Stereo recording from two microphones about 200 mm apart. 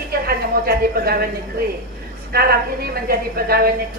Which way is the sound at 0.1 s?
50° right (ahead or behind).